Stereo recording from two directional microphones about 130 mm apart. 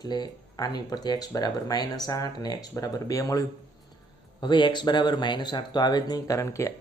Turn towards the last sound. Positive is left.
turn(degrees=25)  # may be behind; listen again after turning